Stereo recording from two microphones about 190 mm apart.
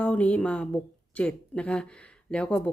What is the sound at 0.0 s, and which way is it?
A woman's voice, 5° left (ahead or behind).